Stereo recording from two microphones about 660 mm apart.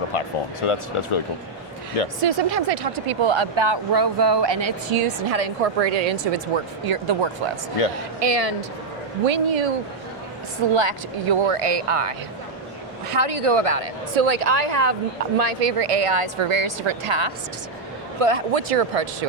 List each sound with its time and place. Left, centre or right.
0.1 s speech: left
2.2 s a woman's voice: right
4.0 s speech: right
5.3 s speech: right
6.9 s speech: right
8.2 s speech: right
10.8 s a woman's voice: right
13.1 s a woman's voice: right
15.4 s a woman's voice: right
18.2 s speech: right